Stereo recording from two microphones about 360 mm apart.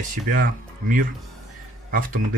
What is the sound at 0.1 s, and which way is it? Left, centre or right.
Speech, right.